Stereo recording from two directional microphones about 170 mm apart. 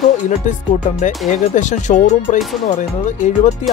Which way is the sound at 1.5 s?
45° left (ahead or behind).